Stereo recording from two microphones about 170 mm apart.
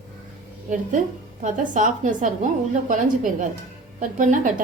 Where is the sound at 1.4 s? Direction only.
50° right (ahead or behind).